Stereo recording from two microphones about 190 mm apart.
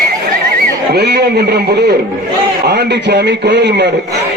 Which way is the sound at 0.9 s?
60° right (ahead or behind).